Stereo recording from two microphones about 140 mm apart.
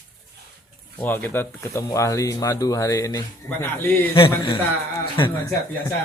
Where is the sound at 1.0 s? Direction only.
15° left (ahead or behind).